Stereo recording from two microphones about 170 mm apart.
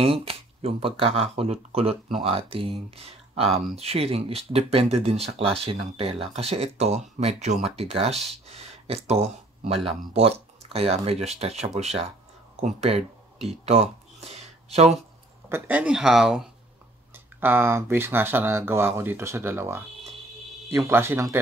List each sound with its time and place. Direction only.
0.0 s speech: 35° right (ahead or behind)
12.5 s a sound: 35° right (ahead or behind)
15.5 s speech: 10° right (ahead or behind)